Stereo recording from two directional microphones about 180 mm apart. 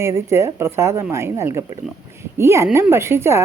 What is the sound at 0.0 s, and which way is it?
Speech, 15° right (ahead or behind).